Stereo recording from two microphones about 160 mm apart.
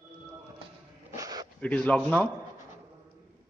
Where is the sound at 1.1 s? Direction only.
20° right (ahead or behind).